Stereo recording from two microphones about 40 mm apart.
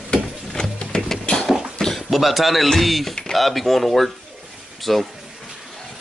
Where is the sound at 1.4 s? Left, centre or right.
Centre.